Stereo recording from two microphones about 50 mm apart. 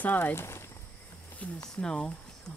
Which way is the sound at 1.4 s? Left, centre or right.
Centre.